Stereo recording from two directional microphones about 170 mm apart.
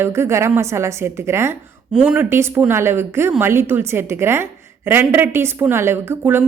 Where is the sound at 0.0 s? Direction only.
15° right (ahead or behind).